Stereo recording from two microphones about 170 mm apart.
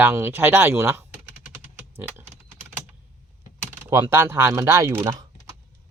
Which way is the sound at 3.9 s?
15° right (ahead or behind).